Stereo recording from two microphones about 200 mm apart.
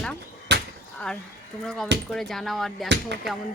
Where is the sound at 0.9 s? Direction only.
5° left (ahead or behind).